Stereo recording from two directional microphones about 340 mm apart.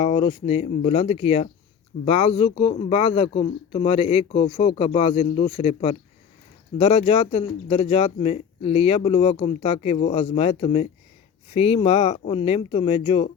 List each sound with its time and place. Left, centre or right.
0.0 s speech: centre